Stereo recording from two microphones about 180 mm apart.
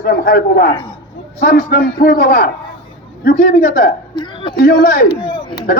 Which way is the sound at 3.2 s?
50° left (ahead or behind).